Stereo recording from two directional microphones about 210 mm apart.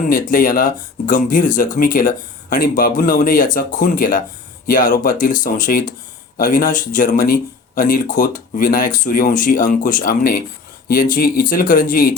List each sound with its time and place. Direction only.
0.1 s speech: 40° left (ahead or behind)